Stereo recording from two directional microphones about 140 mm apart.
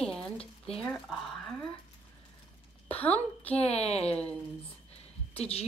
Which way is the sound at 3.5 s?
50° left (ahead or behind).